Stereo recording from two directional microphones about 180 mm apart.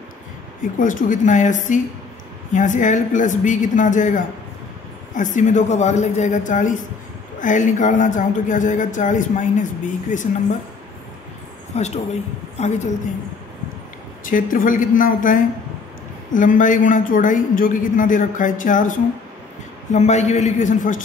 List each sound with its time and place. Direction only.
0.7 s speech: 45° left (ahead or behind)
11.7 s a man's voice: 35° left (ahead or behind)
14.2 s a man's voice: 50° left (ahead or behind)